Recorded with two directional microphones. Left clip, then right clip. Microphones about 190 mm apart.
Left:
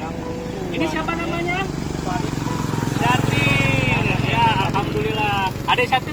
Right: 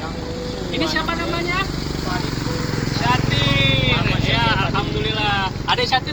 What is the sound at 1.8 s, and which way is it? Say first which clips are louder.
Vehicle: even; 45° left (ahead or behind).